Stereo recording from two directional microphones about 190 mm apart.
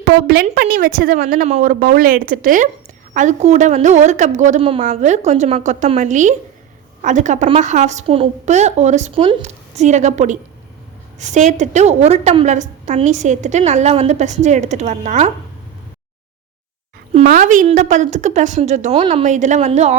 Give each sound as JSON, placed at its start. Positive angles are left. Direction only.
{"t": 0.0, "sound": "a woman's voice", "side_deg": -55}
{"t": 17.3, "sound": "a woman's voice", "side_deg": -45}